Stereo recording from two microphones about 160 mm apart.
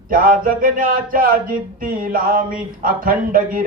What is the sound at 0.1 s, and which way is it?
Mantra, 60° right (ahead or behind).